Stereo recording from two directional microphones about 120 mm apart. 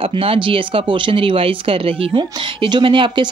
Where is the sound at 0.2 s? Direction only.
50° right (ahead or behind).